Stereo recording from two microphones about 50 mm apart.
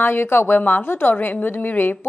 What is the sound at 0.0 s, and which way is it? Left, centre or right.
Speech, left.